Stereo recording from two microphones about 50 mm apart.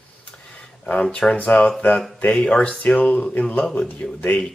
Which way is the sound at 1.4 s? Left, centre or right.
Left.